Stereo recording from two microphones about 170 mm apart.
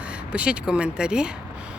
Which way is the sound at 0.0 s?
5° right (ahead or behind).